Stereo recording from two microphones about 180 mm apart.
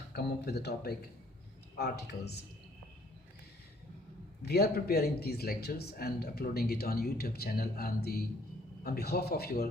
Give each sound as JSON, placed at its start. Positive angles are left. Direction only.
{"t": 0.1, "sound": "speech", "side_deg": 60}
{"t": 4.4, "sound": "speech", "side_deg": 60}